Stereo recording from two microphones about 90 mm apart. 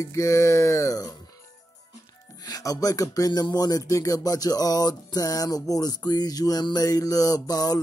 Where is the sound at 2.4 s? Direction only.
40° left (ahead or behind).